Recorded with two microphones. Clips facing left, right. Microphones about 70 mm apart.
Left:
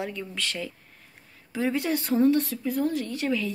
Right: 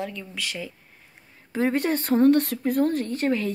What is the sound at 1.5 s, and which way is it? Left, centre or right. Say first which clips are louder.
Speech: right 3 dB; right.